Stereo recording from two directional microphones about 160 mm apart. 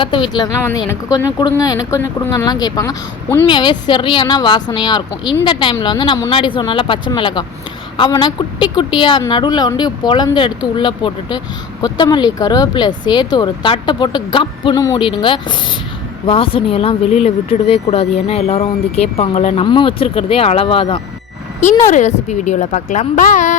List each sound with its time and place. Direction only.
0.0 s a woman's voice: 30° left (ahead or behind)
21.8 s a woman's voice: 45° left (ahead or behind)